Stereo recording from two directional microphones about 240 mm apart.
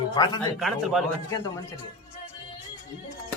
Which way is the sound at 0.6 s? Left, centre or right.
Centre.